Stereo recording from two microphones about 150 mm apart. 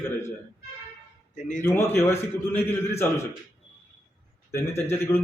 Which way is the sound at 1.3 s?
55° left (ahead or behind).